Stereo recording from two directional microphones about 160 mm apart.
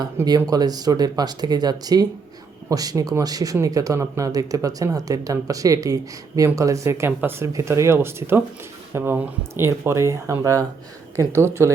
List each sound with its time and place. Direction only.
0.3 s speech: 25° right (ahead or behind)